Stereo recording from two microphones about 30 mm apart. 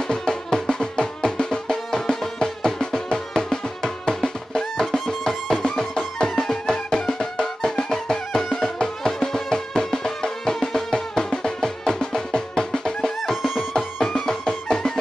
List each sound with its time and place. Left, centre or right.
0.0 s music: left
13.3 s music: centre
14.0 s music: centre